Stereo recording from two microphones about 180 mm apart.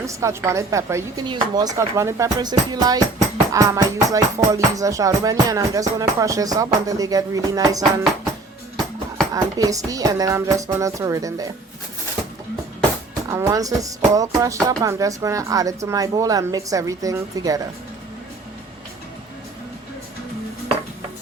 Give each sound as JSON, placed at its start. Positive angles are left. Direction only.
{"t": 0.0, "sound": "speech", "side_deg": -15}
{"t": 9.3, "sound": "speech", "side_deg": -20}
{"t": 13.2, "sound": "speech", "side_deg": -20}